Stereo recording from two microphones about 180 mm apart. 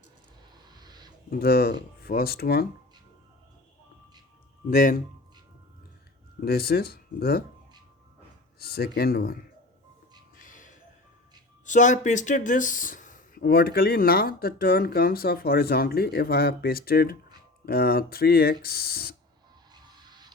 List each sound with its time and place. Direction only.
0.8 s a sound: 20° right (ahead or behind)
1.3 s speech: 60° left (ahead or behind)
4.7 s speech: 50° left (ahead or behind)
6.4 s speech: 60° left (ahead or behind)
8.5 s speech: 60° left (ahead or behind)
10.3 s music: 45° left (ahead or behind)
11.6 s speech: 45° left (ahead or behind)
19.7 s music: 25° right (ahead or behind)